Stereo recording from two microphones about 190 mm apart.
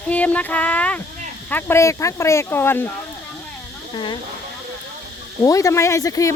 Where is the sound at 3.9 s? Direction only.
25° left (ahead or behind).